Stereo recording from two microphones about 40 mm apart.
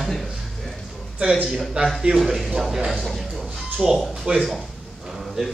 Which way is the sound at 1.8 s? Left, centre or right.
Right.